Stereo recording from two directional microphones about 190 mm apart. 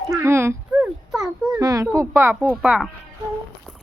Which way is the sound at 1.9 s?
10° right (ahead or behind).